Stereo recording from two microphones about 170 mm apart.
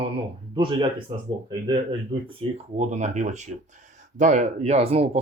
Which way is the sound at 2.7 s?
45° right (ahead or behind).